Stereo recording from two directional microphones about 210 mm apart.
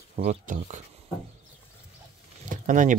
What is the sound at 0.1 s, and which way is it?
Speech, 35° right (ahead or behind).